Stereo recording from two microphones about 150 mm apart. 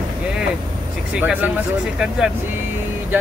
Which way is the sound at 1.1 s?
10° right (ahead or behind).